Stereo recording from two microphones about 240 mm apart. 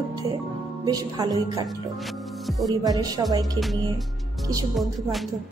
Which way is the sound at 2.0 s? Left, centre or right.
Centre.